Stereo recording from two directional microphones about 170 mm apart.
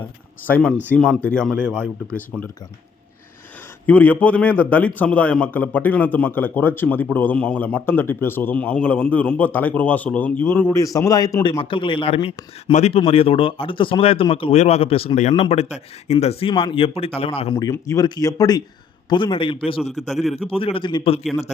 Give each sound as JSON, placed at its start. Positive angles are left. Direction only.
{"t": 0.4, "sound": "a man's voice", "side_deg": 10}
{"t": 1.8, "sound": "speech", "side_deg": -15}
{"t": 3.8, "sound": "a man's voice", "side_deg": 10}
{"t": 17.6, "sound": "speech", "side_deg": 20}
{"t": 19.9, "sound": "a man's voice", "side_deg": 0}
{"t": 20.5, "sound": "speech", "side_deg": 35}